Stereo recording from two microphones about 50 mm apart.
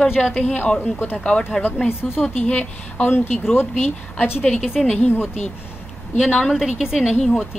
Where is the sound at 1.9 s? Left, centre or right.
Left.